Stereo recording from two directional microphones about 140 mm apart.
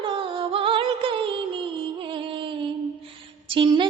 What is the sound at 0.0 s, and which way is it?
Music, 40° right (ahead or behind).